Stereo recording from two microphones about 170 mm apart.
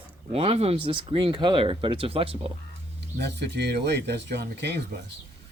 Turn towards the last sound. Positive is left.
turn(degrees=-80)